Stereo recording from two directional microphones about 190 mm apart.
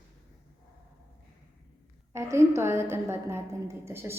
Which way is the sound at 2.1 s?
15° right (ahead or behind).